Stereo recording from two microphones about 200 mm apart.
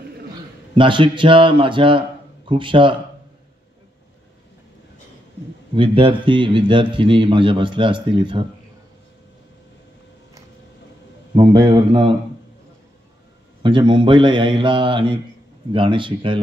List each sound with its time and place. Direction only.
0.7 s a man's voice: 25° right (ahead or behind)
5.8 s a man's voice: 25° right (ahead or behind)
11.3 s a man's voice: 20° right (ahead or behind)
13.6 s a man's voice: 25° right (ahead or behind)